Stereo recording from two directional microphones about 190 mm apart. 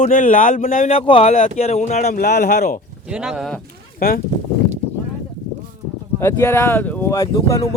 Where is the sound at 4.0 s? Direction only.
50° left (ahead or behind).